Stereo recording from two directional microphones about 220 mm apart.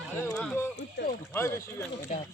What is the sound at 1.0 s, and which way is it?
Speech, 50° left (ahead or behind).